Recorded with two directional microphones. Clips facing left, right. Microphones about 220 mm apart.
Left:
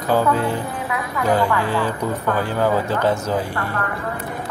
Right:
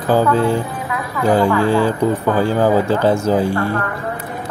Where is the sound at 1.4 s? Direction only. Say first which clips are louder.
Right 6 dB; 30° right (ahead or behind).